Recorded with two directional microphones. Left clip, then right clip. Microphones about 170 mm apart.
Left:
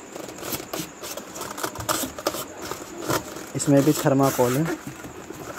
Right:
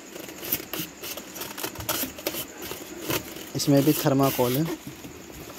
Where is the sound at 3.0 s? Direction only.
5° left (ahead or behind).